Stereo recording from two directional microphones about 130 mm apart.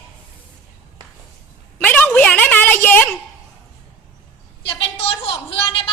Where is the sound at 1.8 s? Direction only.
10° left (ahead or behind).